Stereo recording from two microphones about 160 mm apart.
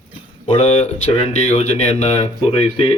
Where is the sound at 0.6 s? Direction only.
40° left (ahead or behind).